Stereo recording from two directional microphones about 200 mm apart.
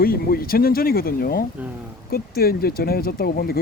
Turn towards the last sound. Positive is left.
turn(degrees=50)  # may be behind; listen again after turning